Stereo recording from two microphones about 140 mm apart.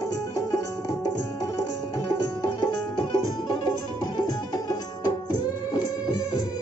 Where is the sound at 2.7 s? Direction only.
35° left (ahead or behind).